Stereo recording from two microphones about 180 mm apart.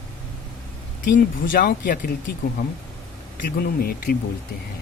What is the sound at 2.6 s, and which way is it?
Speech, 60° left (ahead or behind).